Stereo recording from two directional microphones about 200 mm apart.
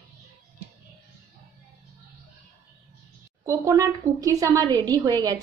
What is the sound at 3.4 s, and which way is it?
A woman's voice, 15° right (ahead or behind).